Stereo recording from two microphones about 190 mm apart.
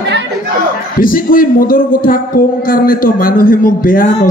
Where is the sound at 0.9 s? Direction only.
50° left (ahead or behind).